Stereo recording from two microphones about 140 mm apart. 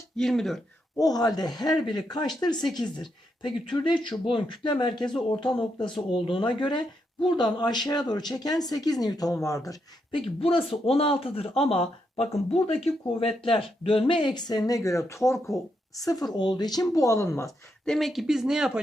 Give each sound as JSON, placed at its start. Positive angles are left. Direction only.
{"t": 0.2, "sound": "speech", "side_deg": 5}
{"t": 0.9, "sound": "speech", "side_deg": 25}
{"t": 5.9, "sound": "speech", "side_deg": 0}
{"t": 6.2, "sound": "speech", "side_deg": 35}
{"t": 9.6, "sound": "a man's voice", "side_deg": 35}
{"t": 17.8, "sound": "speech", "side_deg": 0}